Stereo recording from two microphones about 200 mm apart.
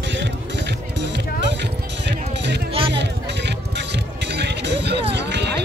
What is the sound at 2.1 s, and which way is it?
Music, 60° right (ahead or behind).